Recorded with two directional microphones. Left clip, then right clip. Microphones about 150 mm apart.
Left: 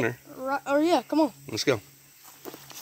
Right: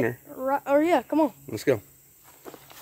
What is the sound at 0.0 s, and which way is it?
Speech, 20° right (ahead or behind).